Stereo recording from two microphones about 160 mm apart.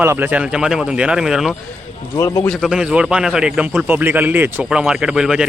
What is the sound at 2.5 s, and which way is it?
Speech, centre (ahead or behind).